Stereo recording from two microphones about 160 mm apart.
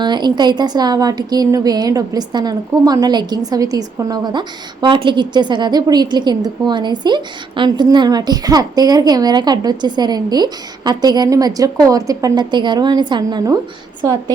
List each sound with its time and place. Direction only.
0.0 s a woman's voice: 25° right (ahead or behind)